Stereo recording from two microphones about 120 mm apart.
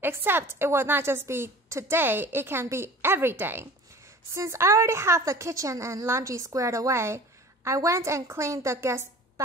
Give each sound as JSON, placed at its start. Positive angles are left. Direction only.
{"t": 0.0, "sound": "a woman's voice", "side_deg": -20}